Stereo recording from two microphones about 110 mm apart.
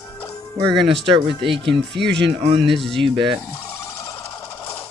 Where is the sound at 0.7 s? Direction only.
45° right (ahead or behind).